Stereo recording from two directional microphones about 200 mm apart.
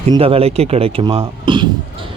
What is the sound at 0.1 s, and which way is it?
Speech, 30° right (ahead or behind).